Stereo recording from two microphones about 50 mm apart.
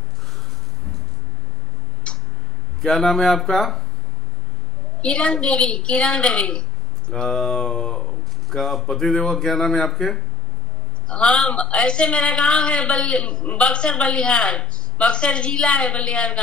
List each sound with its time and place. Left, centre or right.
2.1 s tick: left
2.8 s speech: centre
5.0 s a woman's voice: centre
11.1 s a woman's voice: left